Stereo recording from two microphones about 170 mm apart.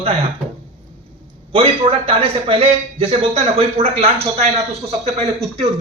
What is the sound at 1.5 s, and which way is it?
A man's voice, 35° right (ahead or behind).